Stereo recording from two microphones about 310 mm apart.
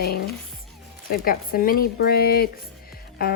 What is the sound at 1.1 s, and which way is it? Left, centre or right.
Speech, left.